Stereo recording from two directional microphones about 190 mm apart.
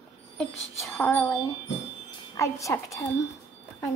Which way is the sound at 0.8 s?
Centre (ahead or behind).